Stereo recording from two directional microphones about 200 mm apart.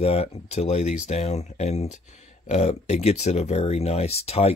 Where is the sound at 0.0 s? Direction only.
30° left (ahead or behind).